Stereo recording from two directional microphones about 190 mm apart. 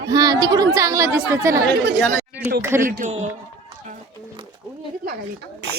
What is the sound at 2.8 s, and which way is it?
Speech, 45° right (ahead or behind).